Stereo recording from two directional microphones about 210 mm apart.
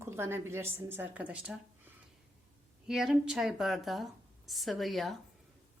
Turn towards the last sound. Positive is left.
turn(degrees=0)  # may be behind; listen again after turning